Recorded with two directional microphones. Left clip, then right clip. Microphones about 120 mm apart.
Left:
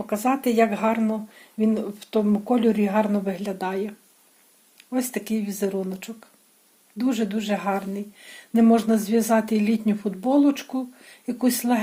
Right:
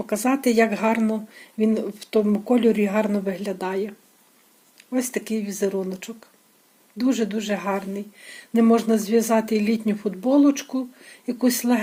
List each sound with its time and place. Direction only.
0.0 s speech: 35° right (ahead or behind); by 11.8 s 20° right (ahead or behind)